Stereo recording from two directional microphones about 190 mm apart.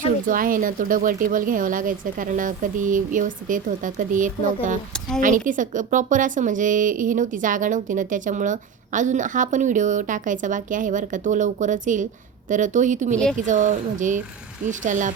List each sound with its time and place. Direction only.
0.3 s a woman's voice: 45° right (ahead or behind)